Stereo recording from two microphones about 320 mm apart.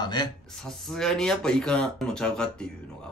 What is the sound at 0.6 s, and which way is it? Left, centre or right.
Speech, centre.